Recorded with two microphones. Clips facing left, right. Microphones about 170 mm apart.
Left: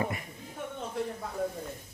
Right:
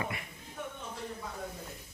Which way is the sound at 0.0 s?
40° left (ahead or behind).